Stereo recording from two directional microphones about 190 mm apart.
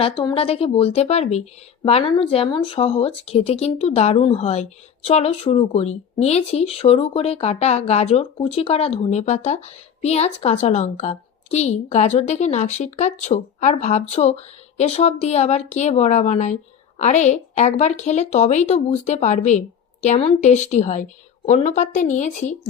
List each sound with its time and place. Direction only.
0.0 s speech: 25° left (ahead or behind)